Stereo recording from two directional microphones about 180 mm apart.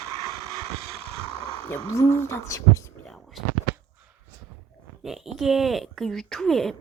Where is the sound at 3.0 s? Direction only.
Centre (ahead or behind).